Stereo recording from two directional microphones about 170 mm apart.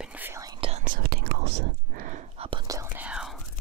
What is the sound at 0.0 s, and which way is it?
Whispering, 10° right (ahead or behind).